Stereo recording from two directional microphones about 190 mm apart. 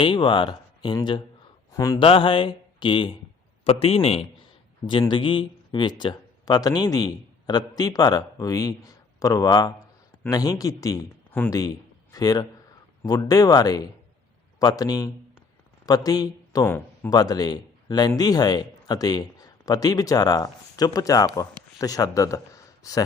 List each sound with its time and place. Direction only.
0.0 s a man's voice: 25° left (ahead or behind)